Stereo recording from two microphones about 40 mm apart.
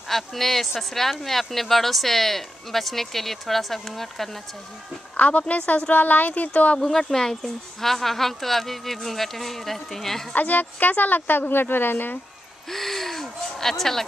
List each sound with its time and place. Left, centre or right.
0.1 s speech: centre
5.1 s a sound: left
5.9 s speech: left
6.5 s speech: left
6.8 s speech: centre
10.3 s speech: left
12.6 s speech: centre